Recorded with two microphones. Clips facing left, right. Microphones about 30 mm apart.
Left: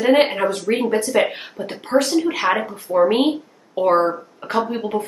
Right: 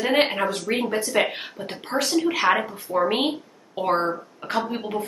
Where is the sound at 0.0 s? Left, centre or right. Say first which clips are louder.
Left 5 dB; centre.